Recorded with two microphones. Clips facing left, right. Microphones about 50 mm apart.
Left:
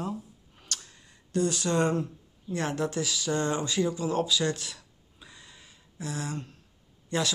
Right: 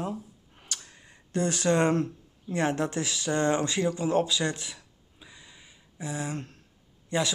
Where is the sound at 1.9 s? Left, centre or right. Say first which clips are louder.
Right 3 dB; right.